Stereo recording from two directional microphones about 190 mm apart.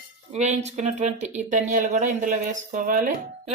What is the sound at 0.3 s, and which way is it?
Speech, 35° right (ahead or behind).